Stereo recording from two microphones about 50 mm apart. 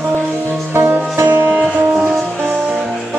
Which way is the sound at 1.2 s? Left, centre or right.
Right.